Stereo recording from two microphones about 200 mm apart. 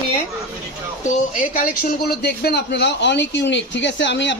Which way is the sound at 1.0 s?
40° left (ahead or behind).